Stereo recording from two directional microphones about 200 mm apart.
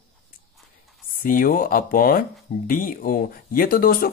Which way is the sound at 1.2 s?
45° left (ahead or behind).